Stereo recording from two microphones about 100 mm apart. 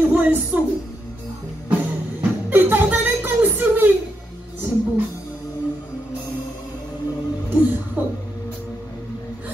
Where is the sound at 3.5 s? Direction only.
20° right (ahead or behind).